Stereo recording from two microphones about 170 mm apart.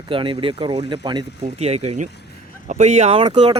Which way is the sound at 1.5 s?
40° right (ahead or behind).